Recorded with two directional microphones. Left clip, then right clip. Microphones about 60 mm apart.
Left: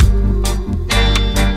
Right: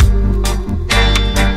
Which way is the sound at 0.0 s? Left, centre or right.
Left.